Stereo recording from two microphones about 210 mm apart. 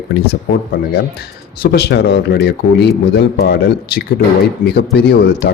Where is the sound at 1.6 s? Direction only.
50° left (ahead or behind).